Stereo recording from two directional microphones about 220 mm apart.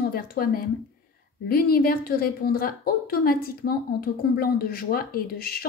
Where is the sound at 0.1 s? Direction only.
40° left (ahead or behind).